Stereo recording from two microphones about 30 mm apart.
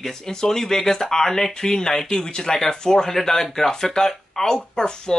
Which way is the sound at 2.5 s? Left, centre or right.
Centre.